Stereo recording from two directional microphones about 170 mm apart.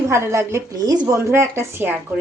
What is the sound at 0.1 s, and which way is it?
A woman's voice, 15° right (ahead or behind).